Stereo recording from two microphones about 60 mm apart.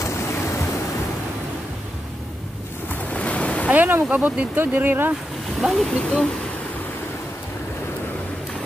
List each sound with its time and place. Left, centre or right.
0.0 s waves: left
2.9 s waves: left
3.7 s speech: right
5.6 s speech: centre